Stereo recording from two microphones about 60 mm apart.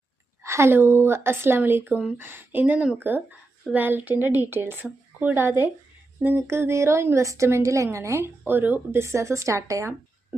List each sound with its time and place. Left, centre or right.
0.4 s a sound: right
0.7 s a woman's voice: right
1.9 s speech: centre
2.1 s a woman's voice: right
8.4 s a woman's voice: right
9.0 s speech: right